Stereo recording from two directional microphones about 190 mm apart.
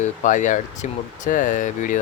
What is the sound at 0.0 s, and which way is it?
Speech, 40° left (ahead or behind).